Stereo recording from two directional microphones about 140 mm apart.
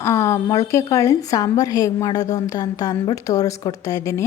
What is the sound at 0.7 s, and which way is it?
A woman's voice, 20° left (ahead or behind).